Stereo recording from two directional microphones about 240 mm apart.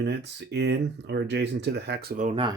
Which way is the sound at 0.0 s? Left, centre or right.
Right.